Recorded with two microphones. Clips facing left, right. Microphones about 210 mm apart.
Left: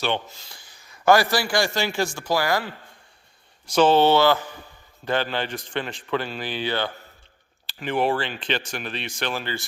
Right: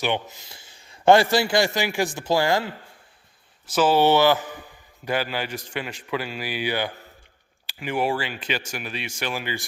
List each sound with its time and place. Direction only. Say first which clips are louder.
0.0 s a man's voice: right 1 dB; 15° right (ahead or behind)
3.7 s speech: left 1 dB; 5° right (ahead or behind)